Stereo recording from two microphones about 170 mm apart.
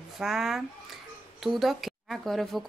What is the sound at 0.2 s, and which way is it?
A woman's voice, centre (ahead or behind).